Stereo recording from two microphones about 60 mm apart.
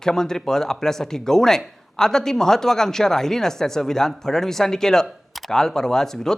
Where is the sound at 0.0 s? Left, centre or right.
Centre.